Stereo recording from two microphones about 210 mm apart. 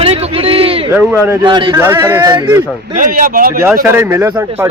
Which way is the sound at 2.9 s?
40° right (ahead or behind).